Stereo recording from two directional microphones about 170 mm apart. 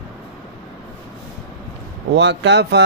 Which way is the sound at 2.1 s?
90° right.